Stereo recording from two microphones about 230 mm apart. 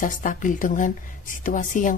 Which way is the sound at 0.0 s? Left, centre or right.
Left.